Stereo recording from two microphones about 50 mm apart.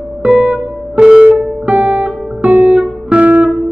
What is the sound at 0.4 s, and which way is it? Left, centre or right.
Music, centre.